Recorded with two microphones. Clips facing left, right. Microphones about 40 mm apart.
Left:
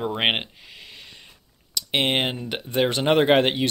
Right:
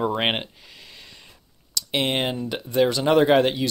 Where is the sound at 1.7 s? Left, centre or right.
Left.